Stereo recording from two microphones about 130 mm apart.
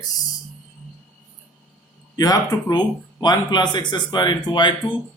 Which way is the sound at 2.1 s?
30° left (ahead or behind).